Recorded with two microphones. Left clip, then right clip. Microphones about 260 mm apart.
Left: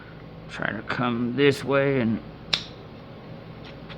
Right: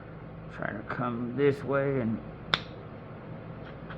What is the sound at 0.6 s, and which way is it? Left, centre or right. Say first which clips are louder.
Speech: left 6 dB; left.